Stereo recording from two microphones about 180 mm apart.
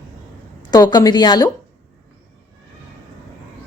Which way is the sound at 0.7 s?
20° left (ahead or behind).